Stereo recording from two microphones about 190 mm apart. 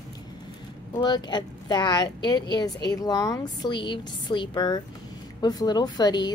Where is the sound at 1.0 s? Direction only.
25° left (ahead or behind).